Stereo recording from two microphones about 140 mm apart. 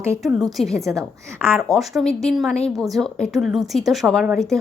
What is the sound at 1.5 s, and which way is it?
A woman's voice, centre (ahead or behind).